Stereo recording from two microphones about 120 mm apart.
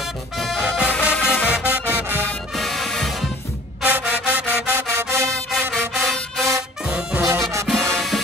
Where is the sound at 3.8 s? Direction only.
15° right (ahead or behind).